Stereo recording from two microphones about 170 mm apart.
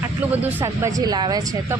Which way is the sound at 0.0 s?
10° right (ahead or behind).